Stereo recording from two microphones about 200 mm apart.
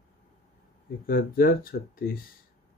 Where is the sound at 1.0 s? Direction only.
45° left (ahead or behind).